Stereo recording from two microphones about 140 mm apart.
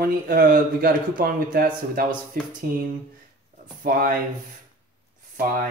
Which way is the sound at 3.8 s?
90° right.